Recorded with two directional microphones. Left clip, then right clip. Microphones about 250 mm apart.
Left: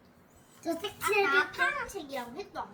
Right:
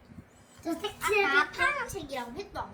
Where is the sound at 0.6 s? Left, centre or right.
Centre.